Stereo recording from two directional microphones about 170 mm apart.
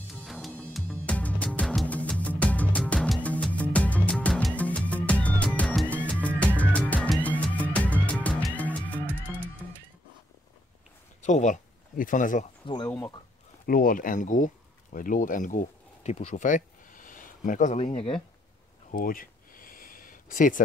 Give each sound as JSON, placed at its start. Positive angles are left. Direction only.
{"t": 0.1, "sound": "music", "side_deg": 0}
{"t": 11.2, "sound": "speech", "side_deg": 45}
{"t": 12.6, "sound": "speech", "side_deg": 25}
{"t": 13.7, "sound": "speech", "side_deg": 55}
{"t": 17.7, "sound": "speech", "side_deg": 35}
{"t": 18.9, "sound": "a sound", "side_deg": 55}